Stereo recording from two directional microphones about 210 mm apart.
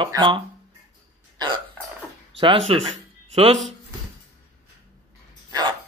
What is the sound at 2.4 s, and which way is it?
Speech, 25° right (ahead or behind).